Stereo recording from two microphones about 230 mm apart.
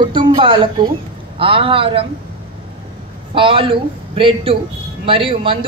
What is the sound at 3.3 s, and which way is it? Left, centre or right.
A woman's voice, right.